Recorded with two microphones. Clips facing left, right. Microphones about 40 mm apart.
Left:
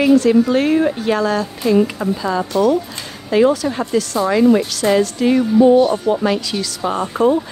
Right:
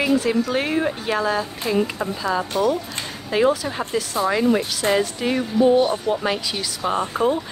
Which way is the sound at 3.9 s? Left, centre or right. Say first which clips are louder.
Left 6 dB; centre.